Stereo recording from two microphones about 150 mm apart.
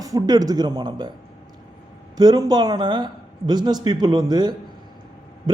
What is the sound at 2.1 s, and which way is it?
A man's voice, 25° right (ahead or behind).